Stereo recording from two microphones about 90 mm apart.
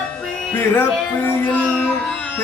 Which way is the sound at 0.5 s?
20° left (ahead or behind).